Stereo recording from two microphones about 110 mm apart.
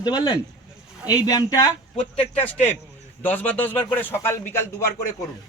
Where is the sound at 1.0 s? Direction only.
35° left (ahead or behind).